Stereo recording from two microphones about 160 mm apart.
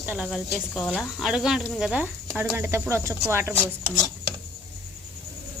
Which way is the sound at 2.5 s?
15° right (ahead or behind).